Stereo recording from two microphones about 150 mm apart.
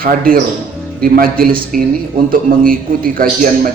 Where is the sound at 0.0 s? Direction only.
75° right (ahead or behind).